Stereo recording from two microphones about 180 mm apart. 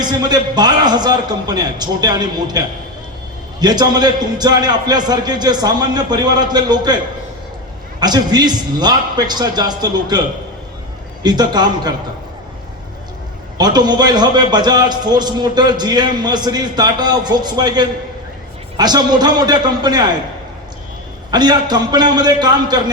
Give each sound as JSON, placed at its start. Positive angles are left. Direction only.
{"t": 0.0, "sound": "a man's voice", "side_deg": -25}
{"t": 13.6, "sound": "a man's voice", "side_deg": -20}
{"t": 21.2, "sound": "a man's voice", "side_deg": -25}